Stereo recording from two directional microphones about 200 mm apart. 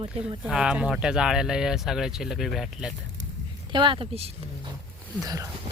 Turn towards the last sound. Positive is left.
turn(degrees=-15)  # may be behind; listen again after turning